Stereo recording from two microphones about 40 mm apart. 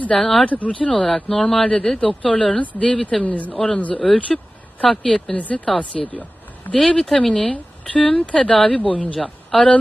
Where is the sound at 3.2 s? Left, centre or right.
Left.